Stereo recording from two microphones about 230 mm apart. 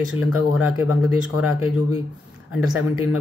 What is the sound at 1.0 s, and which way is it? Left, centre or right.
Speech, centre.